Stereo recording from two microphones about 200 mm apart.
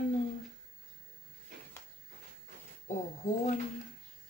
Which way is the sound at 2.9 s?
35° left (ahead or behind).